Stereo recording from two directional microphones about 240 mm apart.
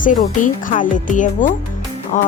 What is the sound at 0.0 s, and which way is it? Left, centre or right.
Music, left.